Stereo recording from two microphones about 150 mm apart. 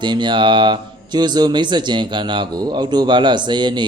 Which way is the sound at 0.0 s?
30° right (ahead or behind).